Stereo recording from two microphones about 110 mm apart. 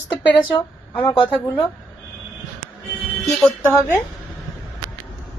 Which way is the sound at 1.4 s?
35° left (ahead or behind).